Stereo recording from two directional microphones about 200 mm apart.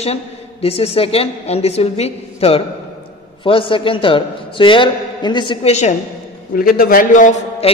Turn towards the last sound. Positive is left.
turn(degrees=40)  # may be behind; listen again after turning